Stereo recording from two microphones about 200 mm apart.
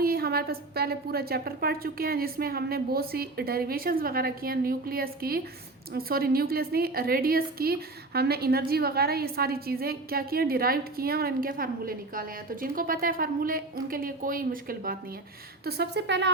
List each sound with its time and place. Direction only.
0.0 s a woman's voice: 50° right (ahead or behind)